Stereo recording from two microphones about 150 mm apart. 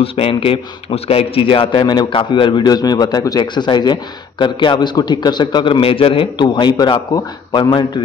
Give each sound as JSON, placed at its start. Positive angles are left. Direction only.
{"t": 0.0, "sound": "a man's voice", "side_deg": 40}